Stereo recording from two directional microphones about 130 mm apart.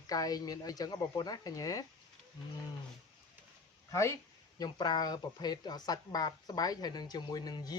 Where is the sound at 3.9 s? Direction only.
20° left (ahead or behind).